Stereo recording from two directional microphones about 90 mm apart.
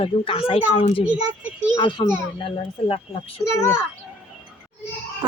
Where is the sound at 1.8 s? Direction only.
60° left (ahead or behind).